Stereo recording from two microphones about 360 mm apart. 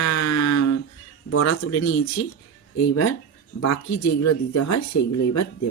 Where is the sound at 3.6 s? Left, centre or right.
Left.